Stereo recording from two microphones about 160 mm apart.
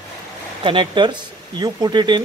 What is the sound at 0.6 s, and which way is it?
Speech, 30° right (ahead or behind).